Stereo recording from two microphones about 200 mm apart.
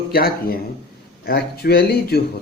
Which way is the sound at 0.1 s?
50° left (ahead or behind).